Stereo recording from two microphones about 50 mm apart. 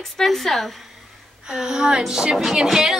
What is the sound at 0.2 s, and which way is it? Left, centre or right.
Music, centre.